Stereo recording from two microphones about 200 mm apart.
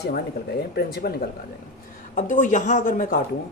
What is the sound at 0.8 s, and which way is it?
Speech, 50° left (ahead or behind).